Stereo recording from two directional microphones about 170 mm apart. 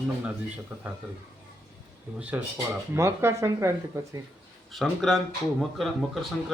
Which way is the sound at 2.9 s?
15° right (ahead or behind).